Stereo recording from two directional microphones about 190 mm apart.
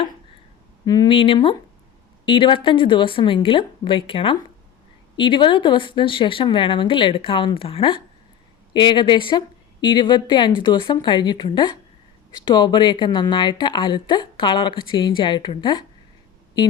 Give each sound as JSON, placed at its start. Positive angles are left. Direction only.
{"t": 0.9, "sound": "speech", "side_deg": 25}